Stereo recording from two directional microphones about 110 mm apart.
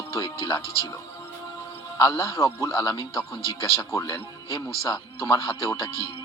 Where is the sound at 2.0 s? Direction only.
30° left (ahead or behind).